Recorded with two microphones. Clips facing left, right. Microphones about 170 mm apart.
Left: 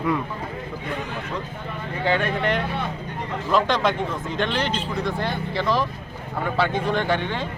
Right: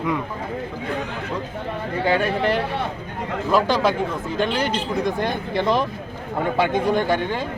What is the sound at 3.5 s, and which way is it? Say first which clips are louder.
A man's voice: right 2 dB; 5° right (ahead or behind).